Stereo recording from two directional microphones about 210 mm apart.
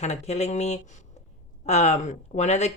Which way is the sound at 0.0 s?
30° left (ahead or behind).